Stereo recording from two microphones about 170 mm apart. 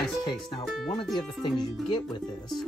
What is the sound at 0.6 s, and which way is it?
Speech, centre (ahead or behind).